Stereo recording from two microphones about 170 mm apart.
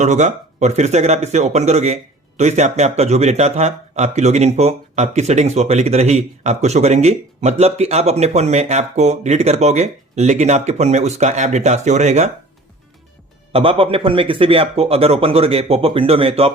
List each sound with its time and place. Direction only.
0.0 s speech: 45° right (ahead or behind)
13.5 s speech: 35° right (ahead or behind)